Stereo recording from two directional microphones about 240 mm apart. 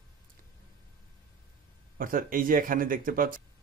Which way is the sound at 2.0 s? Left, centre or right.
Right.